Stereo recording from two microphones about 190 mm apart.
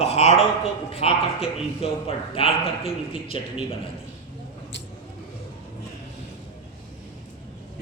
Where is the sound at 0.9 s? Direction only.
30° left (ahead or behind).